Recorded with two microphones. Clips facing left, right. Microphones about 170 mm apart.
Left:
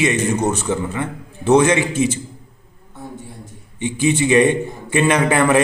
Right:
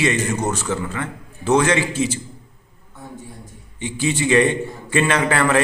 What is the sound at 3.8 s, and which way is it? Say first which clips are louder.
A man's voice: left 4 dB; 20° left (ahead or behind).